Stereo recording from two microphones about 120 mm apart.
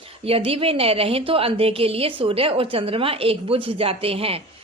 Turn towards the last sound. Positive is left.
turn(degrees=-55)  # may be behind; listen again after turning